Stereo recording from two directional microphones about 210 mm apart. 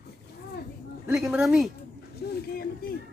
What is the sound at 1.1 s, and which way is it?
Speech, 5° right (ahead or behind).